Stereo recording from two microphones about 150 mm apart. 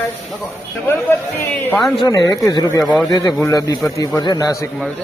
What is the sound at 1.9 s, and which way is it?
Speech, 30° left (ahead or behind).